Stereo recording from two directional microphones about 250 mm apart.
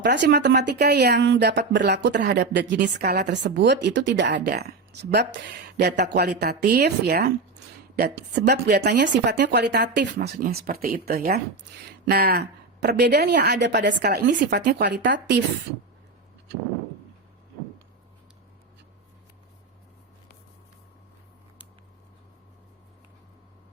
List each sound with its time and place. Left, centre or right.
0.0 s speech: right